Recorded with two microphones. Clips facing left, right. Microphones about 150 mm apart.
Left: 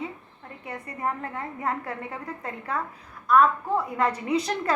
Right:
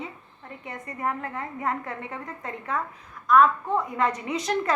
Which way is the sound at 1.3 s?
35° left (ahead or behind).